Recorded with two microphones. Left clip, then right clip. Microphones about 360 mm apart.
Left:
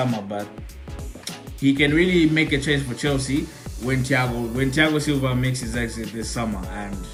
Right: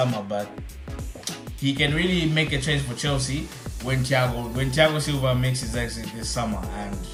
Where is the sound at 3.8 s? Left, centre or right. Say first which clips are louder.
Left 1 dB; centre.